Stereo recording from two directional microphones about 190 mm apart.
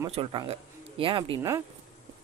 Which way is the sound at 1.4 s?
15° right (ahead or behind).